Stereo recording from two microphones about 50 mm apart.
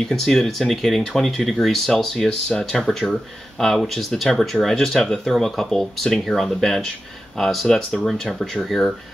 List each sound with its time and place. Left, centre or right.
0.1 s speech: centre